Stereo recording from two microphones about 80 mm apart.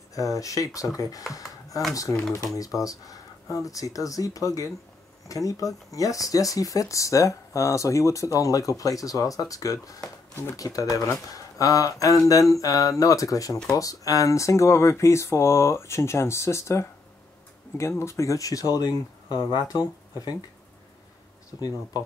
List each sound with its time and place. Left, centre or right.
0.1 s speech: left
21.5 s speech: left